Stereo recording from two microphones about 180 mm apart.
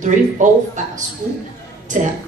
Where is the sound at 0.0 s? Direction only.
45° right (ahead or behind).